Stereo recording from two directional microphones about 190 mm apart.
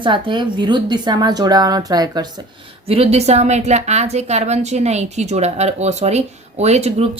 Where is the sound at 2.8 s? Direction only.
30° right (ahead or behind).